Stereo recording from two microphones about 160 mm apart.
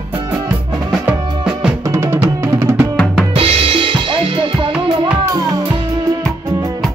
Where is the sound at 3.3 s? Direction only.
35° right (ahead or behind).